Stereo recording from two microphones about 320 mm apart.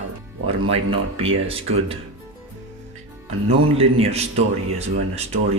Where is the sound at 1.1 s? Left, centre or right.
Centre.